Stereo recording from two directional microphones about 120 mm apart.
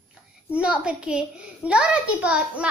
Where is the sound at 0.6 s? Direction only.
10° right (ahead or behind).